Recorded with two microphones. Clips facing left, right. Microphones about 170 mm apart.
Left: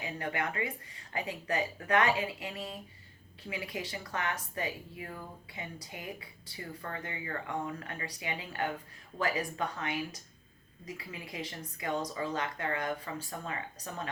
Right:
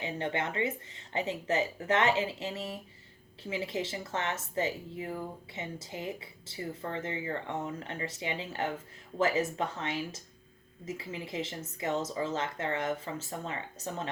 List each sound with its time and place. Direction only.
0.0 s speech: 25° right (ahead or behind)